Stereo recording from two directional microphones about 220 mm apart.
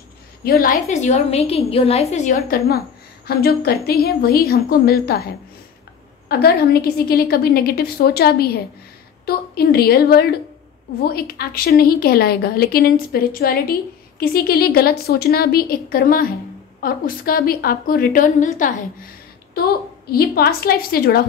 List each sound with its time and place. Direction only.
0.4 s a woman's voice: 40° left (ahead or behind)
20.1 s a woman's voice: 45° left (ahead or behind)